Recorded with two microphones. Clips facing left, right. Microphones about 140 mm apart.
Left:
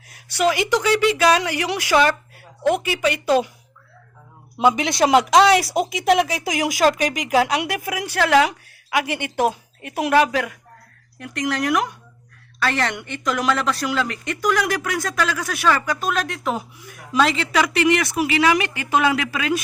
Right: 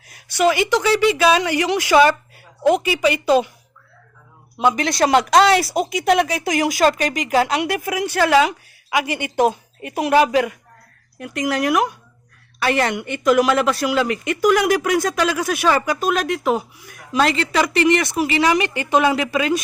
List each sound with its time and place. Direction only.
0.4 s speech: centre (ahead or behind)
2.0 s a woman's voice: 5° right (ahead or behind)
5.1 s a woman's voice: centre (ahead or behind); by 16.0 s 15° right (ahead or behind)
16.0 s speech: 5° right (ahead or behind)